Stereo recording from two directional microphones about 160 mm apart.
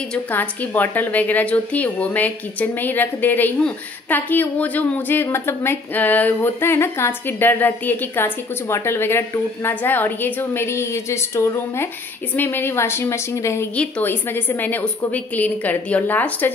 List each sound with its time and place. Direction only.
0.1 s a woman's voice: 10° left (ahead or behind)